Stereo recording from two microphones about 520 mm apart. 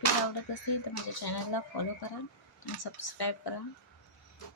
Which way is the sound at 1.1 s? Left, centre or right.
Left.